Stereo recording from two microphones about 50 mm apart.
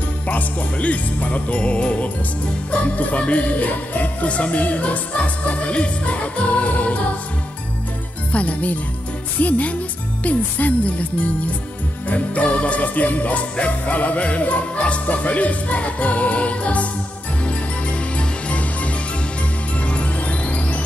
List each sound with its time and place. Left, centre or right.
0.3 s jingle bell: left
8.3 s jingle bell: left
9.4 s music: left
10.2 s jingle bell: left
12.1 s jingle bell: left
17.5 s music: left